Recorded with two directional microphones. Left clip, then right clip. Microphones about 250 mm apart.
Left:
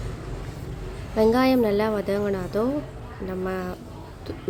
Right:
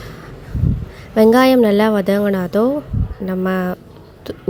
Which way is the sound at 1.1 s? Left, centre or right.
Right.